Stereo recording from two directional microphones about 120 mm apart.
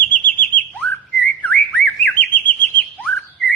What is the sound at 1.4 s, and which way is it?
Bird, 15° left (ahead or behind).